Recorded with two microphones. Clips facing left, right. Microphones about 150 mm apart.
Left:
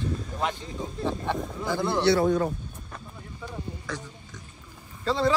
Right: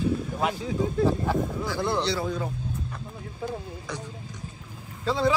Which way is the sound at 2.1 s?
70° left (ahead or behind).